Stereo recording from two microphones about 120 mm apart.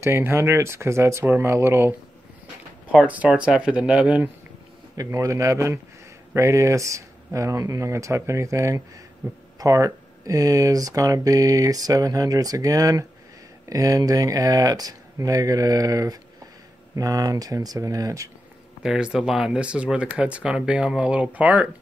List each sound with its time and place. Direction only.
0.0 s speech: 20° right (ahead or behind)
3.0 s speech: 10° right (ahead or behind)
4.9 s speech: 25° right (ahead or behind)
18.8 s speech: 5° right (ahead or behind)